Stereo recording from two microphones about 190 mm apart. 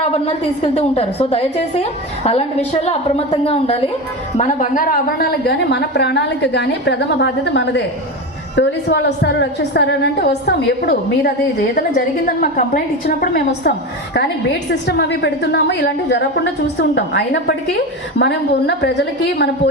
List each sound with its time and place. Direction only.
0.1 s a woman's voice: 30° left (ahead or behind)
4.4 s a woman's voice: 40° left (ahead or behind); by 19.7 s 60° left (ahead or behind)